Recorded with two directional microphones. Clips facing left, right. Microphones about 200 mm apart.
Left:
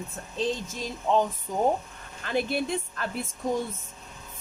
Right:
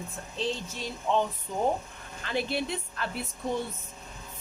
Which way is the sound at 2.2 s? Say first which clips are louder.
Left 3 dB; 50° left (ahead or behind).